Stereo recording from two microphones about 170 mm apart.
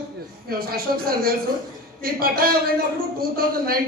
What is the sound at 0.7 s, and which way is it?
A man's voice, 60° right (ahead or behind).